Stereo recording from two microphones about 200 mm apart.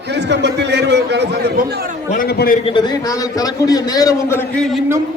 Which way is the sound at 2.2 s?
50° left (ahead or behind).